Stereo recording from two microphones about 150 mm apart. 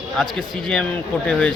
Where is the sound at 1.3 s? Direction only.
10° left (ahead or behind).